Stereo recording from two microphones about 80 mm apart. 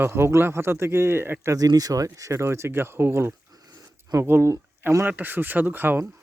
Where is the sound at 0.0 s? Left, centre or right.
Right.